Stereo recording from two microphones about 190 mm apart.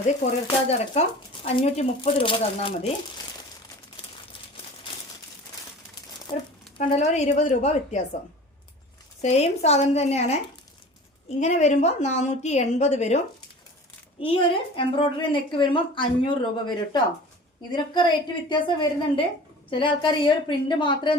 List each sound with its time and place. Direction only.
0.7 s speech: 35° left (ahead or behind)
6.3 s a woman's voice: 20° left (ahead or behind)
6.7 s speech: 35° left (ahead or behind)
9.2 s speech: 35° left (ahead or behind)
14.2 s a woman's voice: 30° left (ahead or behind)